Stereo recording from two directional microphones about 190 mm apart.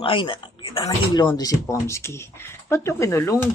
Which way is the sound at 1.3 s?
15° left (ahead or behind).